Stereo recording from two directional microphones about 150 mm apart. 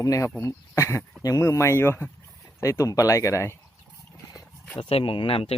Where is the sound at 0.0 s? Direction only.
20° left (ahead or behind).